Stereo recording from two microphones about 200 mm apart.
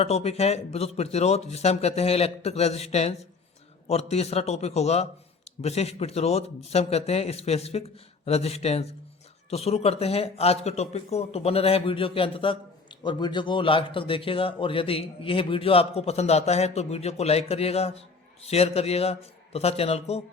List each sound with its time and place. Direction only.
0.0 s a man's voice: 30° left (ahead or behind)